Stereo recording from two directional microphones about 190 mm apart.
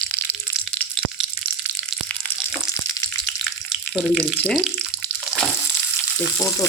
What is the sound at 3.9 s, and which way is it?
Speech, 5° left (ahead or behind).